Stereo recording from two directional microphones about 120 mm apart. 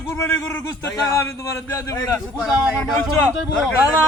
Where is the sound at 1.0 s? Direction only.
25° left (ahead or behind).